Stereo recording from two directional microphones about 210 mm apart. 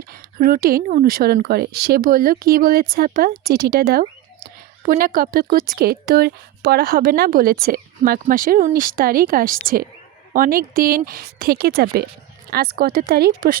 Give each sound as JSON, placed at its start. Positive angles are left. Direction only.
{"t": 0.1, "sound": "a woman's voice", "side_deg": -45}